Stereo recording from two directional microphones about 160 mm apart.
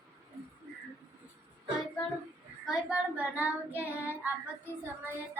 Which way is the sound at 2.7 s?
10° right (ahead or behind).